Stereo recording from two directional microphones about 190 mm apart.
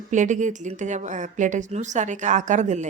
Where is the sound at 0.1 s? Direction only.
40° right (ahead or behind).